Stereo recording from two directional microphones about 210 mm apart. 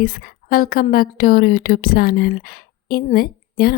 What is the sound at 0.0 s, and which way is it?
A woman's voice, 45° left (ahead or behind).